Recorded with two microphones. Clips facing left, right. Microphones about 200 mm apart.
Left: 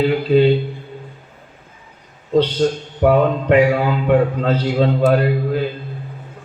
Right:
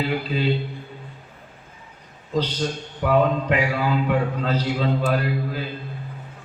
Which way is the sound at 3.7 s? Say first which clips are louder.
Left 6 dB; 50° left (ahead or behind).